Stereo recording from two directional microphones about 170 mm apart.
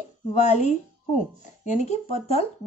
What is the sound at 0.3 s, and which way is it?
A woman's voice, 40° left (ahead or behind).